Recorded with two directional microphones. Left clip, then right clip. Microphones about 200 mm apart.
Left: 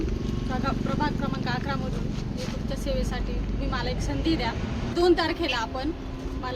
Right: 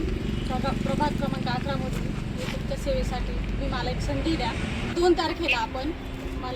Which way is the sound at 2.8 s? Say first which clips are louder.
Right 2 dB; centre (ahead or behind).